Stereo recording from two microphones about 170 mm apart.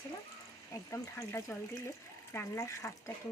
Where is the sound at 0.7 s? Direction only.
20° left (ahead or behind).